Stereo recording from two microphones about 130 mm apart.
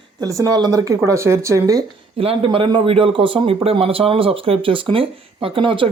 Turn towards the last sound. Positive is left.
turn(degrees=-40)  # may be behind; listen again after turning